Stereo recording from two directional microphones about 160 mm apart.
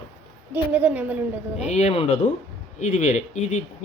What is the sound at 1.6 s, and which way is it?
Speech, 45° left (ahead or behind).